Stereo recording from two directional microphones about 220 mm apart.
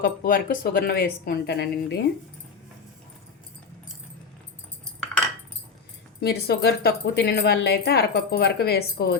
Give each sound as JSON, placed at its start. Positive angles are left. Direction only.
{"t": 0.0, "sound": "speech", "side_deg": 40}
{"t": 6.2, "sound": "speech", "side_deg": 45}